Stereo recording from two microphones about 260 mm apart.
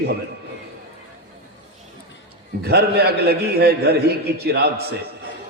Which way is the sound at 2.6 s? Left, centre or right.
Right.